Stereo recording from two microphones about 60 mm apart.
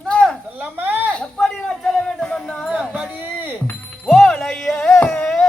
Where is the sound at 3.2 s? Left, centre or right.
Right.